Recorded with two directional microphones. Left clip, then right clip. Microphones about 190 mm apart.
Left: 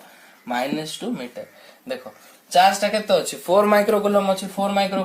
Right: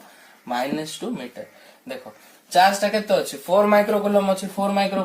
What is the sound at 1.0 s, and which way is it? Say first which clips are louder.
Speech: left 1 dB; 25° left (ahead or behind).